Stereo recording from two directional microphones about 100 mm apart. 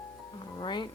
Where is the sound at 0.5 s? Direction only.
50° left (ahead or behind).